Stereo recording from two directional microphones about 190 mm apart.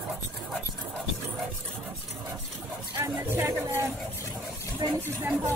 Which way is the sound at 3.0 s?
15° right (ahead or behind).